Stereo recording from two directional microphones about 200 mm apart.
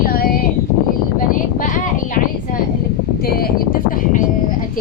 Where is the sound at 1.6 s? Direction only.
40° left (ahead or behind).